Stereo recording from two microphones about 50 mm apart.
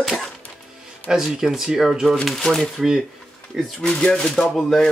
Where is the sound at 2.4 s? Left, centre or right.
Centre.